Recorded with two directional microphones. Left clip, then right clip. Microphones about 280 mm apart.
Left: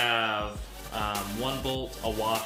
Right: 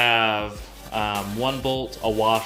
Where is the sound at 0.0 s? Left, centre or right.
Right.